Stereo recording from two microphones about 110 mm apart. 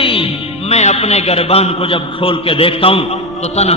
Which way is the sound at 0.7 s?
75° left (ahead or behind).